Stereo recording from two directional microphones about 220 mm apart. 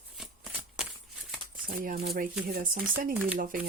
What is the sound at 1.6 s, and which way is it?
Speech, 40° right (ahead or behind).